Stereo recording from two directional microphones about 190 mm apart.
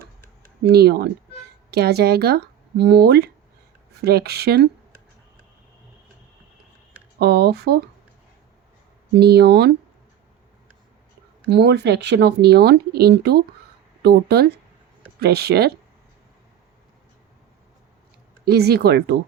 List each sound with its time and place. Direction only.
0.7 s speech: 60° right (ahead or behind)
7.2 s speech: 60° right (ahead or behind)
9.1 s speech: 60° right (ahead or behind)
11.5 s speech: 60° right (ahead or behind)
18.4 s speech: 55° right (ahead or behind)